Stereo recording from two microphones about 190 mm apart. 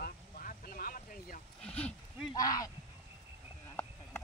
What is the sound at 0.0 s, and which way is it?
Vehicle, 45° left (ahead or behind).